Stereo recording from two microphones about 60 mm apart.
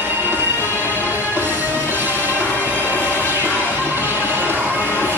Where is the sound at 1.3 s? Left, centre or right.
Right.